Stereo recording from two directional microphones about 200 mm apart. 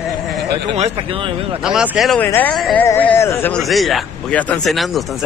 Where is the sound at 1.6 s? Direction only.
5° right (ahead or behind).